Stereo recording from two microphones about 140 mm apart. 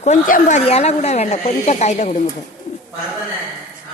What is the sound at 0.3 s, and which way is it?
Speech, 70° left (ahead or behind).